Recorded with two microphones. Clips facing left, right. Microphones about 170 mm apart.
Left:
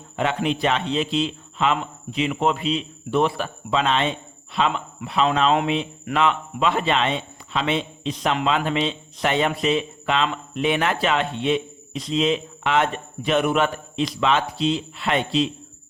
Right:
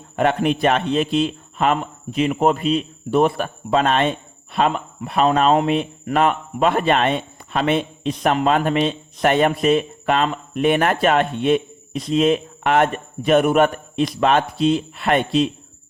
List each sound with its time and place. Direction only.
0.2 s a man's voice: 50° right (ahead or behind)